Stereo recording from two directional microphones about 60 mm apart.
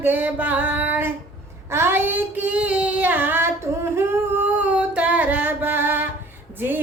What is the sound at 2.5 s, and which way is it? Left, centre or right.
Singing, right.